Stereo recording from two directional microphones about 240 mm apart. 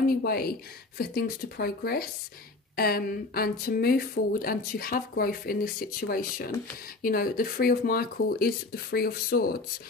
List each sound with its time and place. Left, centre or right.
0.0 s speech: left